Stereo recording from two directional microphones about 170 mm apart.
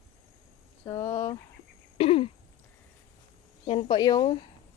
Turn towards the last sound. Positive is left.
turn(degrees=25)  # may be behind; listen again after turning